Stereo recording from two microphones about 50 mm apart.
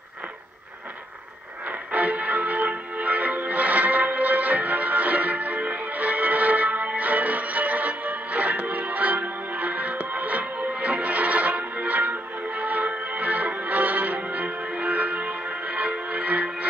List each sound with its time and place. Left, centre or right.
1.7 s music: right